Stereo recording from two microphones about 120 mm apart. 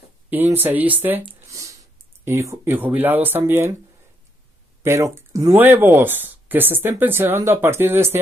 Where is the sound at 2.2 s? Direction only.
20° right (ahead or behind).